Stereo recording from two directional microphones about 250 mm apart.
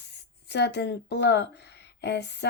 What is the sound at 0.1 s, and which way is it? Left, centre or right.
Speech, left.